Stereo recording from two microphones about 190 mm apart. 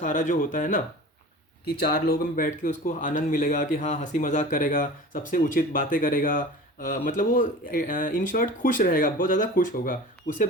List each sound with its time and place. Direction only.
0.0 s speech: 40° left (ahead or behind)